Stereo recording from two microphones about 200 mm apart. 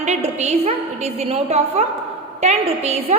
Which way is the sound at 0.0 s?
35° right (ahead or behind).